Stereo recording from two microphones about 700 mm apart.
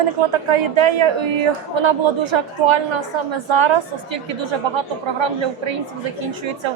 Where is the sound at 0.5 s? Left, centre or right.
Right.